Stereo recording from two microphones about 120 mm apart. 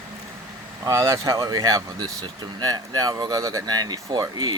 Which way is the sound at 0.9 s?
30° right (ahead or behind).